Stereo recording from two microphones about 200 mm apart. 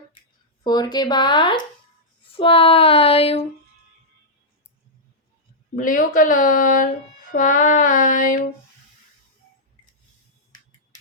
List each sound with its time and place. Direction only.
0.6 s speech: 20° left (ahead or behind)
5.7 s speech: 45° left (ahead or behind)
7.3 s female singing: 45° left (ahead or behind)